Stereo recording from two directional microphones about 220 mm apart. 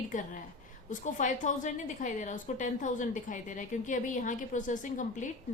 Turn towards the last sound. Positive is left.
turn(degrees=35)  # may be behind; listen again after turning